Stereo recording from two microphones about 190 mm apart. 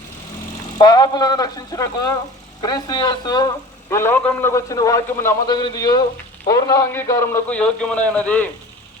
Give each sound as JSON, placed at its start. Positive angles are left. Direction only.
{"t": 0.8, "sound": "a man's voice", "side_deg": 20}